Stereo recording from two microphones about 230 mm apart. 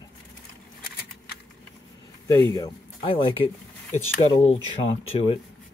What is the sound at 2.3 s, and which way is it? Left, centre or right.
Speech, centre.